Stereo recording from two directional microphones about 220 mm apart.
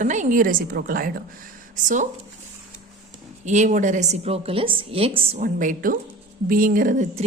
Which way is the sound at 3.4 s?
30° right (ahead or behind).